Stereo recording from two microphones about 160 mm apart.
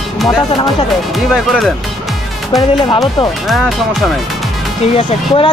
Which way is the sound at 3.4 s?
Centre (ahead or behind).